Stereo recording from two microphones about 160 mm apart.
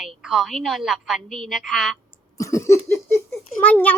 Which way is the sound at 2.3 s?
20° left (ahead or behind).